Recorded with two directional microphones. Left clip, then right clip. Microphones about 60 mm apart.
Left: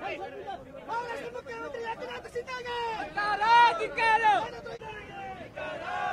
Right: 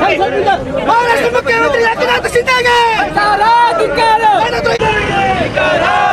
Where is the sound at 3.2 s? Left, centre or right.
Left.